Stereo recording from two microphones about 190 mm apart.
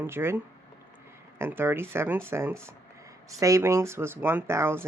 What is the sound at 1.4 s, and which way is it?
Speech, 10° right (ahead or behind).